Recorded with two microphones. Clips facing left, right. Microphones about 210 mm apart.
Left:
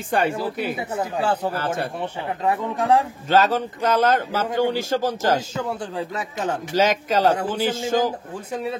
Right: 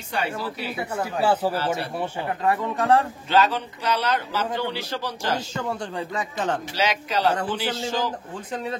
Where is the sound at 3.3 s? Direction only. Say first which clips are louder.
Left 3 dB; 45° left (ahead or behind).